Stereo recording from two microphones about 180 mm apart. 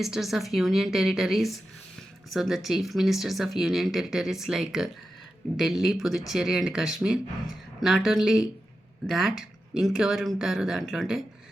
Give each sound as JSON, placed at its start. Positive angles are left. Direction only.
{"t": 0.0, "sound": "speech", "side_deg": 0}